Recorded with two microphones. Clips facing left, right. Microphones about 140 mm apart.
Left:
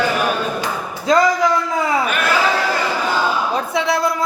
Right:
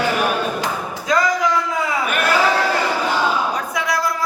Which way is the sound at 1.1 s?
30° left (ahead or behind).